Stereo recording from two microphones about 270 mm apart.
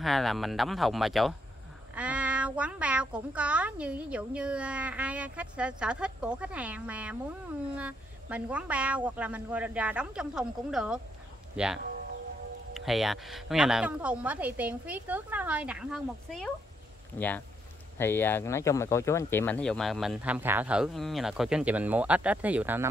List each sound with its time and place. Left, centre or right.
0.0 s speech: centre
17.9 s speech: centre